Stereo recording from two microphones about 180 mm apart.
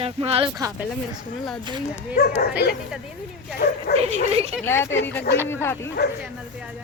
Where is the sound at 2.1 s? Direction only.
55° left (ahead or behind).